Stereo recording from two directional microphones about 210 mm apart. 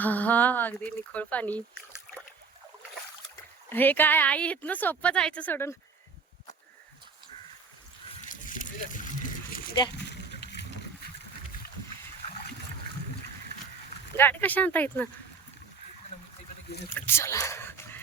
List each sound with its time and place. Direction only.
0.0 s a woman's voice: 5° left (ahead or behind)
3.7 s a woman's voice: 10° left (ahead or behind)
8.3 s a sound: 40° left (ahead or behind)
10.1 s a sound: 55° left (ahead or behind)
14.2 s a woman's voice: 10° left (ahead or behind)
16.9 s speech: 10° left (ahead or behind)